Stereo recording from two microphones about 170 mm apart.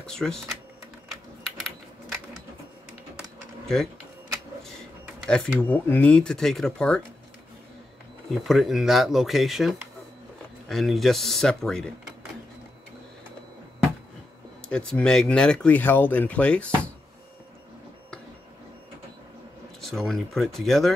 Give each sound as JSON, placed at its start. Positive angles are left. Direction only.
{"t": 0.0, "sound": "speech", "side_deg": 5}
{"t": 3.6, "sound": "speech", "side_deg": 0}
{"t": 5.2, "sound": "speech", "side_deg": 5}
{"t": 8.3, "sound": "speech", "side_deg": 0}
{"t": 14.7, "sound": "speech", "side_deg": 5}
{"t": 19.8, "sound": "speech", "side_deg": 0}